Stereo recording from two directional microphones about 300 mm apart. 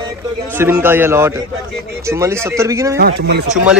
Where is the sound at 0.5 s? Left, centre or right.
Centre.